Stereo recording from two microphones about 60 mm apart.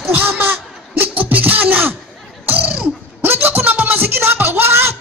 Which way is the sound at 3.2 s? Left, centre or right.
Right.